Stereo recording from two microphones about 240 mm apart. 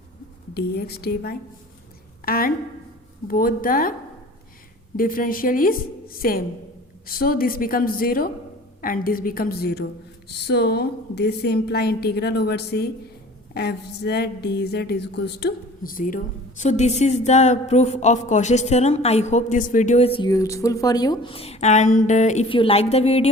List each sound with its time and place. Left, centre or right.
0.5 s a woman's voice: left
4.9 s a woman's voice: left
13.5 s a sound: left